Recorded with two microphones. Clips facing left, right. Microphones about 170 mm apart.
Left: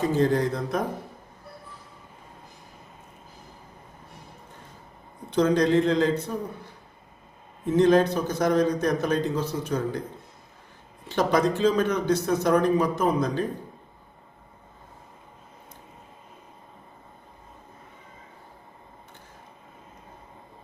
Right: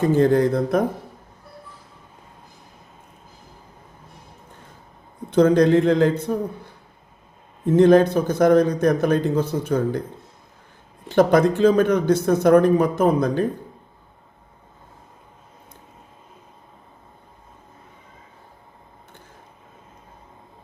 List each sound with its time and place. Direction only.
0.2 s speech: 55° right (ahead or behind)
5.3 s a man's voice: 55° right (ahead or behind)
7.8 s a man's voice: 50° right (ahead or behind)
11.1 s a man's voice: 55° right (ahead or behind)